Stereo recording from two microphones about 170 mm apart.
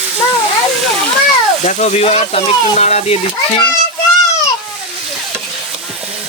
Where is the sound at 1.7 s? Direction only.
45° left (ahead or behind).